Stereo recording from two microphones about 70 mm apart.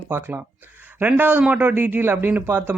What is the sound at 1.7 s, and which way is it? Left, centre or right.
Speech, right.